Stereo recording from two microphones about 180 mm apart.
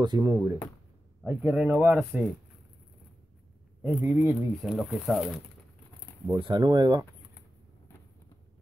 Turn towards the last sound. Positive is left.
turn(degrees=-25)  # may be behind; listen again after turning